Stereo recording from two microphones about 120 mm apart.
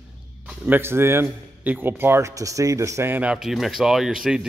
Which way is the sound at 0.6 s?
20° right (ahead or behind).